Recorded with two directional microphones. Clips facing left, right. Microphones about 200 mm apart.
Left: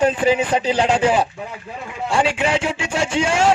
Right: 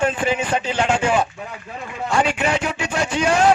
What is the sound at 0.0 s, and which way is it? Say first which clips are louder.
Speech: left 4 dB; 35° left (ahead or behind).